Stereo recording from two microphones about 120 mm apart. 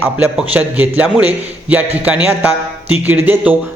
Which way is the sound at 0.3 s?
15° right (ahead or behind).